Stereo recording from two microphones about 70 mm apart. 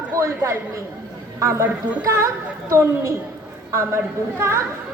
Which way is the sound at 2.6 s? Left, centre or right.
Right.